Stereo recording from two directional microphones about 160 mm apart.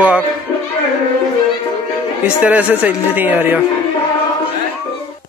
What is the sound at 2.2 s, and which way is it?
Speech, 10° right (ahead or behind).